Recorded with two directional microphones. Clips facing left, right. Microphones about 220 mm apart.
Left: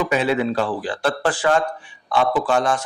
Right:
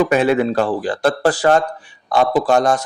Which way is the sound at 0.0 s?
50° right (ahead or behind).